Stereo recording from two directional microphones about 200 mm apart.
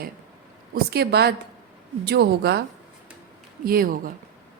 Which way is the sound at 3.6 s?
45° right (ahead or behind).